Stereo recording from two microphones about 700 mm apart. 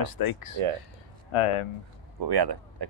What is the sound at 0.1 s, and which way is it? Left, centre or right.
Speech, left.